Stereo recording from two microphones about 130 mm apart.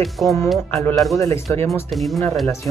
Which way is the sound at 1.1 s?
20° left (ahead or behind).